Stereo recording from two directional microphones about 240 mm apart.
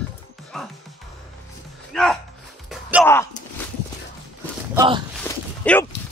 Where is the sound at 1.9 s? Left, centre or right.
Centre.